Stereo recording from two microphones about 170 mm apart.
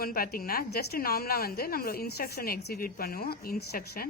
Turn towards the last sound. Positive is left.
turn(degrees=65)  # may be behind; listen again after turning